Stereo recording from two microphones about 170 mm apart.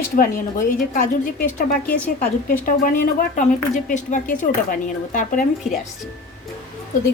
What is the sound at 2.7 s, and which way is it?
Speech, 55° left (ahead or behind).